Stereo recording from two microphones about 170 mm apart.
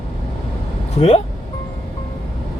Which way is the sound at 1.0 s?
35° left (ahead or behind).